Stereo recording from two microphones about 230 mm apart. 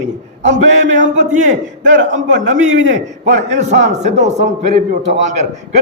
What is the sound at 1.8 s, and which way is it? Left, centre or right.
A man's voice, right.